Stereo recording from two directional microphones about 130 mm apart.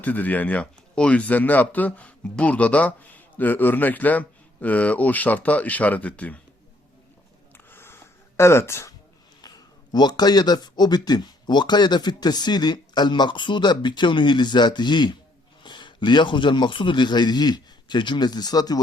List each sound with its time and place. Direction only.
0.0 s a man's voice: 10° left (ahead or behind)
7.5 s a sound: 15° left (ahead or behind)
8.4 s speech: 20° left (ahead or behind)
9.4 s a man's voice: 30° left (ahead or behind)